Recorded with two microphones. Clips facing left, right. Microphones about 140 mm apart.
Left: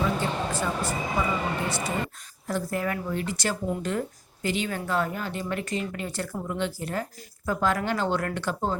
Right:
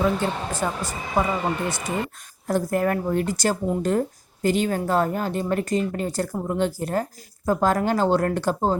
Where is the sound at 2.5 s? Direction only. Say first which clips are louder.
Right 6 dB; 45° right (ahead or behind).